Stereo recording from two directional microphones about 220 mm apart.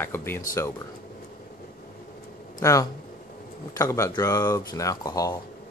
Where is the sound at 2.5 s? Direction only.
15° left (ahead or behind).